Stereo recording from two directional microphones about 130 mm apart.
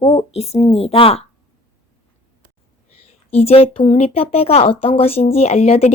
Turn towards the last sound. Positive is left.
turn(degrees=55)  # may be behind; listen again after turning